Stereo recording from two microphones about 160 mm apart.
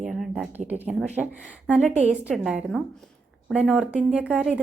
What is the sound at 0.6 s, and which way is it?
A woman's voice, 10° right (ahead or behind).